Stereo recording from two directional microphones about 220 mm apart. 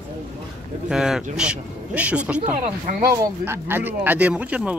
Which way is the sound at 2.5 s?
35° right (ahead or behind).